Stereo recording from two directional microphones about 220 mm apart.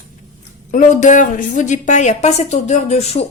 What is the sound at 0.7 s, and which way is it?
A woman's voice, 35° left (ahead or behind).